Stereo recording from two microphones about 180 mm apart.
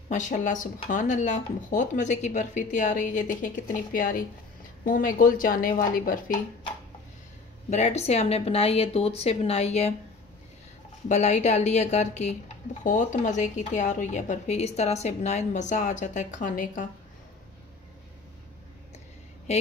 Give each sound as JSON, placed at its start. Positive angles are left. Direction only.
{"t": 0.1, "sound": "speech", "side_deg": 45}
{"t": 7.7, "sound": "speech", "side_deg": 40}
{"t": 11.1, "sound": "speech", "side_deg": 40}